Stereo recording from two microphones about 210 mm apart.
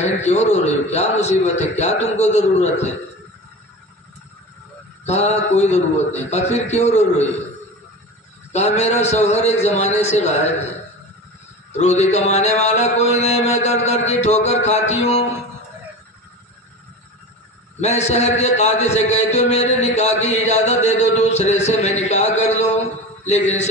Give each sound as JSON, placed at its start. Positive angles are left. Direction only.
{"t": 0.0, "sound": "a man's voice", "side_deg": 30}
{"t": 5.0, "sound": "a man's voice", "side_deg": 30}
{"t": 8.5, "sound": "a man's voice", "side_deg": 30}
{"t": 11.7, "sound": "a man's voice", "side_deg": 30}
{"t": 17.7, "sound": "a man's voice", "side_deg": 30}